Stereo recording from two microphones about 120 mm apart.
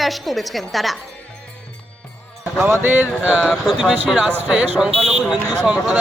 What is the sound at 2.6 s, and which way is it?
Speech, 20° right (ahead or behind).